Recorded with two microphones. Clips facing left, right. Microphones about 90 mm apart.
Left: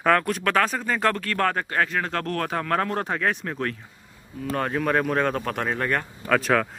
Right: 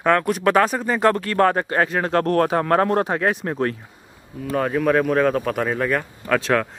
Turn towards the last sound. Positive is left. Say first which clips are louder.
# right 2 dB
turn(degrees=5)  # may be behind; listen again after turning